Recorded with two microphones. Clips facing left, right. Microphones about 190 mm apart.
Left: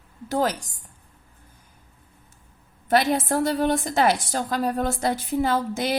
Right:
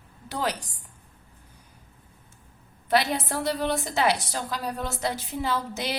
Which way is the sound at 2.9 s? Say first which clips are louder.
Left 4 dB; 45° left (ahead or behind).